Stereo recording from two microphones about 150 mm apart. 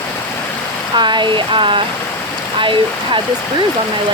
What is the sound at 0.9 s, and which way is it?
Speech, 30° right (ahead or behind).